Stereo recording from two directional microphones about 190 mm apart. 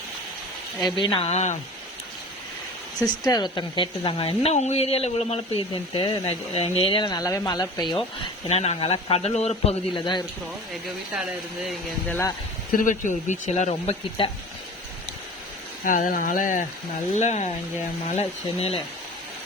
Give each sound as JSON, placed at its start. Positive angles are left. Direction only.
{"t": 0.8, "sound": "speech", "side_deg": 20}
{"t": 3.0, "sound": "speech", "side_deg": 20}
{"t": 12.0, "sound": "speech", "side_deg": 10}
{"t": 12.7, "sound": "speech", "side_deg": 45}
{"t": 15.8, "sound": "speech", "side_deg": 45}